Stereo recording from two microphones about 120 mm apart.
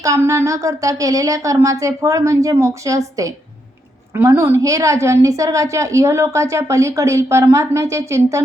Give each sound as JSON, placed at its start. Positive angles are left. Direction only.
{"t": 0.0, "sound": "a woman's voice", "side_deg": -25}